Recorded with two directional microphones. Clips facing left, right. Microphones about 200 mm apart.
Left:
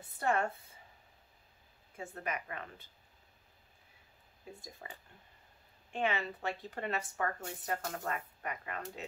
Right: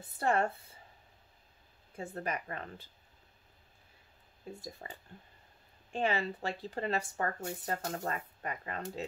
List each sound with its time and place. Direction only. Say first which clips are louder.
0.2 s speech: right 2 dB; 35° right (ahead or behind)
2.0 s speech: right 3 dB; 35° right (ahead or behind)
4.8 s speech: right 3 dB; 35° right (ahead or behind)